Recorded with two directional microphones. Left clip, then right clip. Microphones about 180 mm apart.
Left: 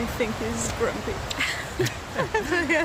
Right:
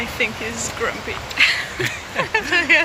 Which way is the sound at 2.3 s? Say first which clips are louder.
Right 8 dB; 25° left (ahead or behind).